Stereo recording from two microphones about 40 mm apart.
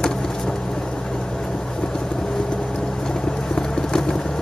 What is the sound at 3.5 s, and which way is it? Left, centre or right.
Vehicle, centre.